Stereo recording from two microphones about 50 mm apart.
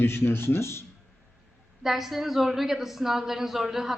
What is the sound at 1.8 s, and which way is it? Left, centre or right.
A woman's voice, centre.